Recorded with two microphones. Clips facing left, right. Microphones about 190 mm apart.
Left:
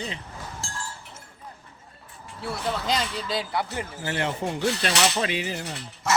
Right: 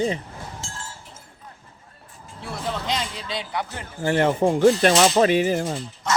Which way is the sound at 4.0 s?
50° right (ahead or behind).